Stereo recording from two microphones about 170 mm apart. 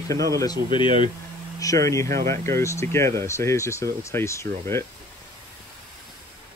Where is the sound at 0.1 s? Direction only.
20° left (ahead or behind).